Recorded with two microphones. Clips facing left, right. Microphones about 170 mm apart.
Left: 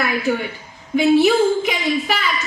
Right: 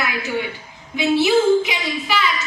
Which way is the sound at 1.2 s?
50° left (ahead or behind).